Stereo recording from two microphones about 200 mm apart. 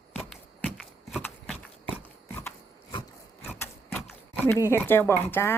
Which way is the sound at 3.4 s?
10° left (ahead or behind).